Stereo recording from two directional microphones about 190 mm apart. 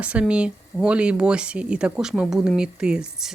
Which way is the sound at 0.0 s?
5° right (ahead or behind).